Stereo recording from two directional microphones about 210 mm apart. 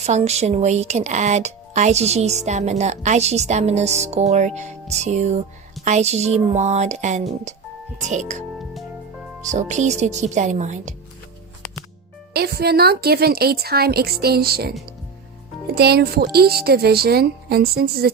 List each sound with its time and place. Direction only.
0.0 s speech: 30° right (ahead or behind)
12.3 s a woman's voice: 50° right (ahead or behind)
15.7 s a woman's voice: 50° right (ahead or behind)